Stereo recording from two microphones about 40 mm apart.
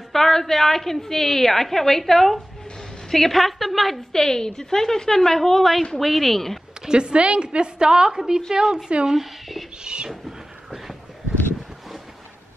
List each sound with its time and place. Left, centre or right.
0.1 s a woman's voice: centre
4.1 s a woman's voice: centre
6.9 s a woman's voice: right; by 9.7 s centre